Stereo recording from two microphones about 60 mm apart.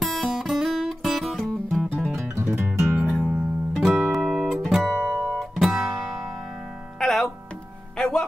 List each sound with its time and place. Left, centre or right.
0.0 s music: centre
2.1 s guitar: right
2.6 s music: right
3.2 s music: centre
4.9 s guitar: right
5.4 s music: centre
7.0 s music: centre